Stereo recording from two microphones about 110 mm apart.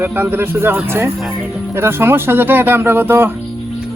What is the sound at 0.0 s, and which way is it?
Speech, 20° right (ahead or behind).